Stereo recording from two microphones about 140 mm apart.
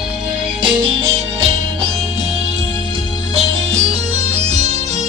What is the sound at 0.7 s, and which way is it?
Music, 40° right (ahead or behind).